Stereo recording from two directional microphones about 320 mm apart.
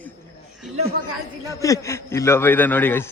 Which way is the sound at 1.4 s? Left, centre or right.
Centre.